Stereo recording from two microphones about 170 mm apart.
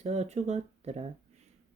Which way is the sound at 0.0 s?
40° right (ahead or behind).